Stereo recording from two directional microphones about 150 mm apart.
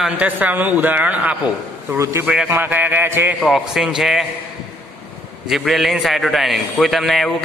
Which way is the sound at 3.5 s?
5° right (ahead or behind).